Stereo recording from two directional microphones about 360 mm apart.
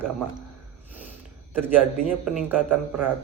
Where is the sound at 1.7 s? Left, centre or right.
Centre.